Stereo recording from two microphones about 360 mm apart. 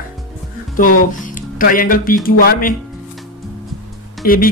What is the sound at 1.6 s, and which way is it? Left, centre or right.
Speech, left.